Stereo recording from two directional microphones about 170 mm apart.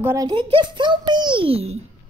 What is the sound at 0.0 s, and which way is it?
Speech, 15° right (ahead or behind).